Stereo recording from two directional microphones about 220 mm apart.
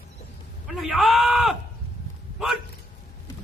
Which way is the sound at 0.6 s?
Centre (ahead or behind).